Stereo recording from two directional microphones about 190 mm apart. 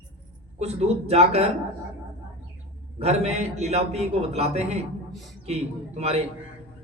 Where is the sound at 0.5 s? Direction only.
35° right (ahead or behind).